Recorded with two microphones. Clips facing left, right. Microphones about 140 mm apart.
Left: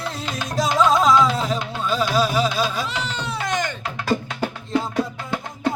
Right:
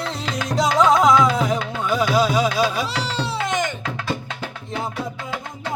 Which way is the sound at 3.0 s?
35° right (ahead or behind).